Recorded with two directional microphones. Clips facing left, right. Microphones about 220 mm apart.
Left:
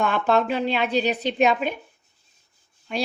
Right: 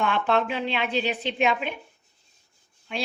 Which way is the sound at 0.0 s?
40° left (ahead or behind).